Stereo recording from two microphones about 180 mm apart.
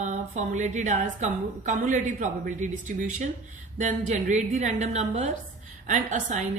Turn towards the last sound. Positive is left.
turn(degrees=-40)  # may be behind; listen again after turning